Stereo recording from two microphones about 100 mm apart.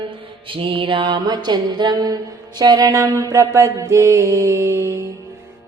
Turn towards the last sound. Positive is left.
turn(degrees=-30)  # may be behind; listen again after turning